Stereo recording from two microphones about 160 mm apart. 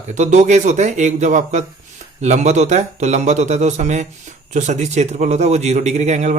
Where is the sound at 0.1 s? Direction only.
50° right (ahead or behind).